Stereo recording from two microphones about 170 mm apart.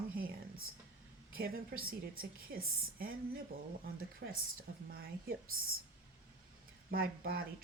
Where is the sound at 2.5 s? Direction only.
60° right (ahead or behind).